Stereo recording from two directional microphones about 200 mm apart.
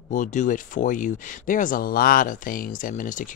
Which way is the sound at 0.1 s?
40° left (ahead or behind).